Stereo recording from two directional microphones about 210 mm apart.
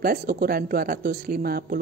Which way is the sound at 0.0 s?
45° right (ahead or behind).